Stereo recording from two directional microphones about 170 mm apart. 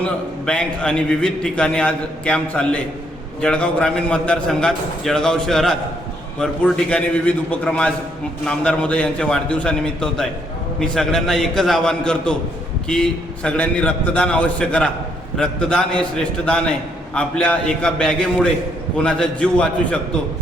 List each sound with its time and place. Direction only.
0.0 s a man's voice: 5° left (ahead or behind)